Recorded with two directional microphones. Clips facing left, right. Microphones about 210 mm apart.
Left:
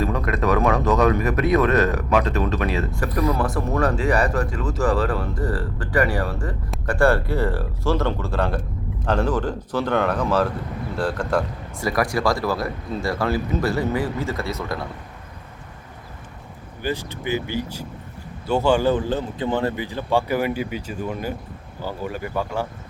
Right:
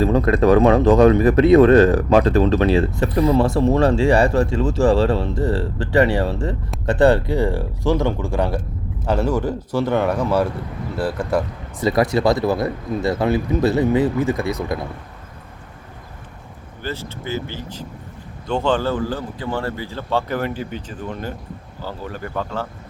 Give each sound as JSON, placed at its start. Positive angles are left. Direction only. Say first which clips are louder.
{"t": 0.0, "sound": "speech", "louder": "right 7 dB", "side_deg": -30}
{"t": 11.8, "sound": "speech", "louder": "right 5 dB", "side_deg": -25}
{"t": 16.8, "sound": "speech", "louder": "left 2 dB", "side_deg": 15}